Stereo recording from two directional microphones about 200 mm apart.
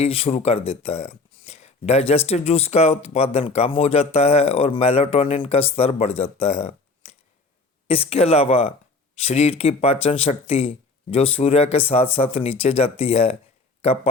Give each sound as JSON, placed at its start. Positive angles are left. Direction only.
{"t": 0.0, "sound": "speech", "side_deg": 30}